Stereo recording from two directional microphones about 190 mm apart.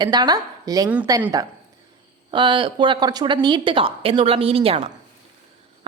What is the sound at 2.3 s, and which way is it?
A woman's voice, 25° right (ahead or behind).